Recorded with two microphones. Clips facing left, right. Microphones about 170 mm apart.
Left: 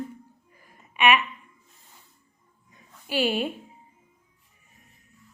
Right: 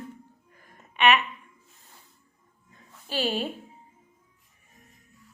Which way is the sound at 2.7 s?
15° left (ahead or behind).